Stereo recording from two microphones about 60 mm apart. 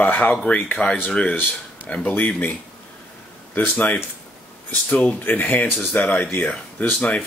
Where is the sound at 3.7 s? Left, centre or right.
Left.